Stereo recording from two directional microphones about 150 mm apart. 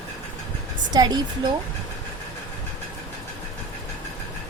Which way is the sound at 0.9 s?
30° right (ahead or behind).